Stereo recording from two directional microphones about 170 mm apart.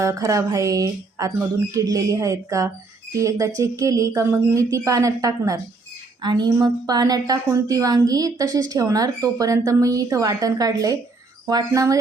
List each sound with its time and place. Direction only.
0.0 s a woman's voice: 20° right (ahead or behind)